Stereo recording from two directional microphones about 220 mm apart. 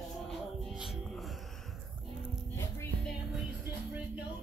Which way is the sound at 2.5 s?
10° left (ahead or behind).